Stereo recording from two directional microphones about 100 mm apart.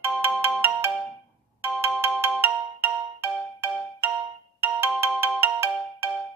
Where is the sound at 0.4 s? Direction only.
25° right (ahead or behind).